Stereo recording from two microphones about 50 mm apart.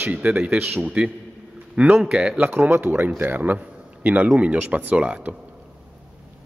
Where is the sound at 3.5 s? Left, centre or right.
Right.